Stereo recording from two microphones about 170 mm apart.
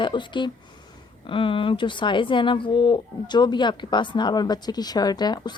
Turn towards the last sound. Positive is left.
turn(degrees=25)  # may be behind; listen again after turning